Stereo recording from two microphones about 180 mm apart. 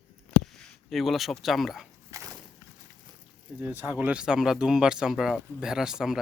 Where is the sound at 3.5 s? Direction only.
10° right (ahead or behind).